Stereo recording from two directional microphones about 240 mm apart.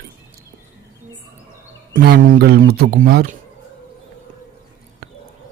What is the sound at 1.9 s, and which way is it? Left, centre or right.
Speech, right.